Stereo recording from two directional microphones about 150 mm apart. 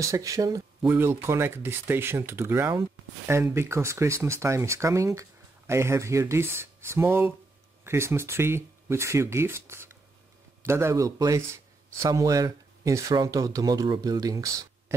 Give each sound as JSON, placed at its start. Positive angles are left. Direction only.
{"t": 0.0, "sound": "speech", "side_deg": -20}